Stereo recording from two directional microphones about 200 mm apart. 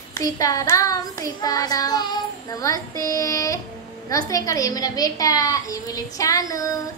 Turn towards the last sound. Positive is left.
turn(degrees=15)  # may be behind; listen again after turning